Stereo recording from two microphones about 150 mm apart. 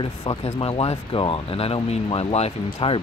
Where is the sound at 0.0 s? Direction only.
35° left (ahead or behind).